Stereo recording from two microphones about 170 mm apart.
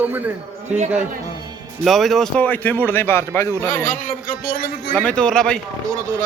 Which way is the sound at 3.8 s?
60° left (ahead or behind).